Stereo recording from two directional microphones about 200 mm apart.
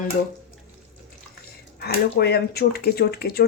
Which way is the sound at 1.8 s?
55° left (ahead or behind).